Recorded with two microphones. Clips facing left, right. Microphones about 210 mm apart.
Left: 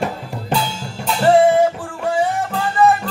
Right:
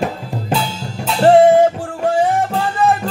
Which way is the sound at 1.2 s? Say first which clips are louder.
Right 3 dB; 40° right (ahead or behind).